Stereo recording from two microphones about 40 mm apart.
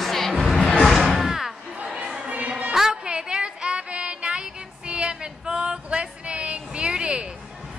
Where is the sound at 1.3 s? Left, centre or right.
Centre.